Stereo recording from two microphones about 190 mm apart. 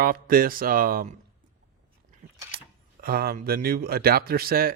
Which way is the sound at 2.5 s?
50° right (ahead or behind).